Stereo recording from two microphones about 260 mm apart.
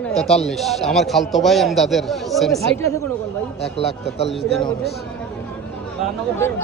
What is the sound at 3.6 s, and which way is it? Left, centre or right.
Speech, left.